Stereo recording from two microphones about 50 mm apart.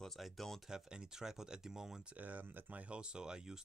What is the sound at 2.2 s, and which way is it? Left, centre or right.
Speech, right.